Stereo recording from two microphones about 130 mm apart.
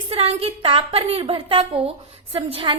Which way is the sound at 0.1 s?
50° right (ahead or behind).